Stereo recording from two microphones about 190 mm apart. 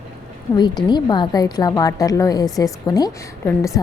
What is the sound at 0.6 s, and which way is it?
A woman's voice, 20° left (ahead or behind).